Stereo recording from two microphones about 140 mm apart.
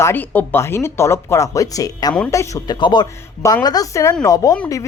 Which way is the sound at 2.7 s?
35° left (ahead or behind).